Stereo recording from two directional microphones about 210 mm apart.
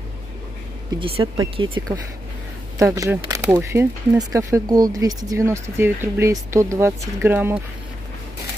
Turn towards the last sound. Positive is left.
turn(degrees=-10)  # may be behind; listen again after turning